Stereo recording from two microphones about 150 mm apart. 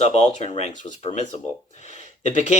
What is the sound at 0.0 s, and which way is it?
Speech, 45° left (ahead or behind).